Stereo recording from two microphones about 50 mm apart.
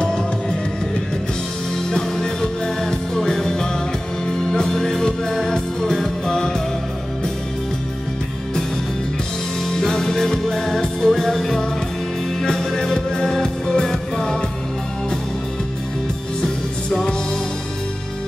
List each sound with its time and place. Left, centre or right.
0.0 s music: centre
1.9 s music: centre
9.8 s music: centre
16.3 s music: centre